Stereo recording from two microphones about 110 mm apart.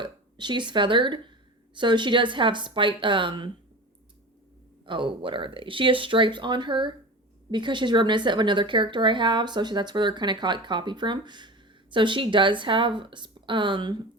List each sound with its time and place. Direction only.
0.0 s a woman's voice: 45° right (ahead or behind)
4.9 s speech: 50° right (ahead or behind)